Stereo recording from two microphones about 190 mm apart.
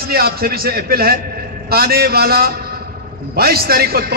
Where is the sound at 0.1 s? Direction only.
55° right (ahead or behind).